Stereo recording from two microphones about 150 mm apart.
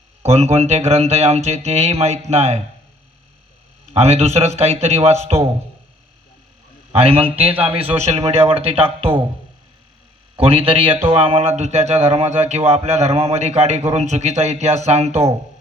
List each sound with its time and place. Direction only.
0.2 s speech: 45° right (ahead or behind)
3.9 s speech: 45° right (ahead or behind)
6.9 s speech: 40° right (ahead or behind)
10.3 s speech: 40° right (ahead or behind)